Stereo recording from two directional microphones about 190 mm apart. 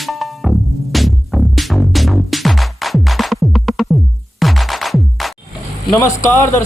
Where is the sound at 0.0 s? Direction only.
Centre (ahead or behind).